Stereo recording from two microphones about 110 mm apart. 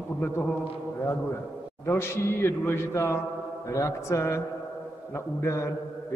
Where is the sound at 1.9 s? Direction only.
25° left (ahead or behind).